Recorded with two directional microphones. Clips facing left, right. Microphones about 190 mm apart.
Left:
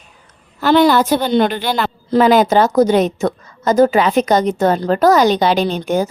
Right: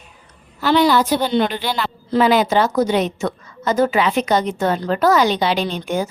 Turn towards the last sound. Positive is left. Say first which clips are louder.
# left 5 dB
turn(degrees=40)  # may be behind; listen again after turning